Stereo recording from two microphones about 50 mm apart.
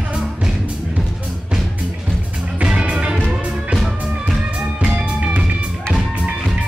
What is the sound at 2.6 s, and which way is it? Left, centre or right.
Music, right.